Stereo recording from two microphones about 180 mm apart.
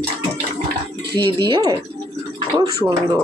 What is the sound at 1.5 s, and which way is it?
Speech, 20° right (ahead or behind).